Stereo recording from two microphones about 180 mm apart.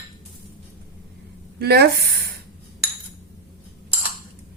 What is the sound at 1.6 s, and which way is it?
Speech, 65° right (ahead or behind).